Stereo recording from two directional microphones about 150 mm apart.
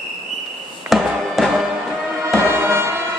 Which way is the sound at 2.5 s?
15° right (ahead or behind).